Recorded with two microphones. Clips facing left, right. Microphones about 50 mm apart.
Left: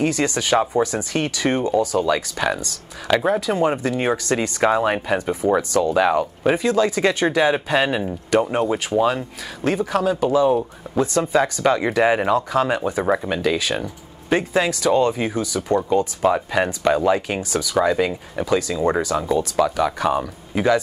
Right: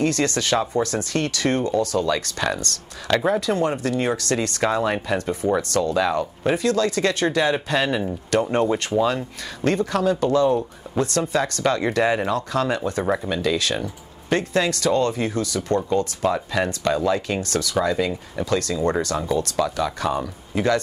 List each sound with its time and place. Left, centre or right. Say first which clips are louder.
0.0 s speech: left 1 dB; centre
3.6 s speech: left 2 dB; centre
8.5 s speech: even; centre
9.6 s speech: left 1 dB; centre
19.6 s speech: left 4 dB; left